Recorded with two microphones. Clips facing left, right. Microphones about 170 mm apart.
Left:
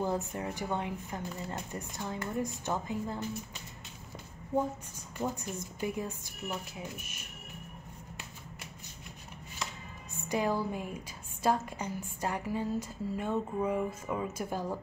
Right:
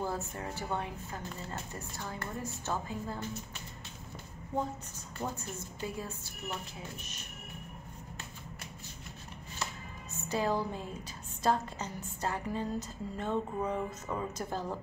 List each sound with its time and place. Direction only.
0.0 s a woman's voice: 15° left (ahead or behind)
5.1 s a woman's voice: 15° left (ahead or behind)
10.1 s a woman's voice: 15° left (ahead or behind)